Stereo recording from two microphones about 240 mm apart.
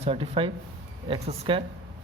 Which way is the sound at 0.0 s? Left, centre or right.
Right.